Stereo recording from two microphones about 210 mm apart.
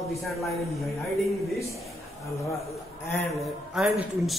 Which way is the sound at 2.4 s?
15° left (ahead or behind).